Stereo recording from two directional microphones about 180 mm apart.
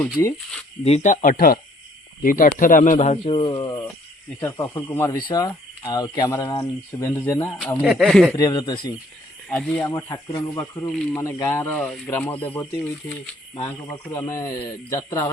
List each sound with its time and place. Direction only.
0.2 s speech: 15° left (ahead or behind)
0.9 s speech: 40° left (ahead or behind); by 7.7 s 15° left (ahead or behind)
7.8 s speech: centre (ahead or behind)
8.4 s speech: 20° left (ahead or behind)
9.5 s speech: 5° left (ahead or behind)
10.0 s speech: 20° left (ahead or behind)
14.0 s speech: 15° left (ahead or behind)